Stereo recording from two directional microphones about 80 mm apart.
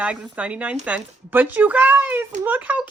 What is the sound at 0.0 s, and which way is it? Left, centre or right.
Speech, centre.